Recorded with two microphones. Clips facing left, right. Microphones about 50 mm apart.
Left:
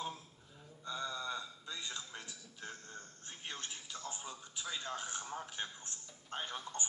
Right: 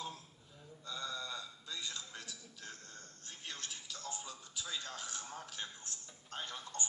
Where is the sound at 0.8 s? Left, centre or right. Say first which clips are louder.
Left 3 dB; left.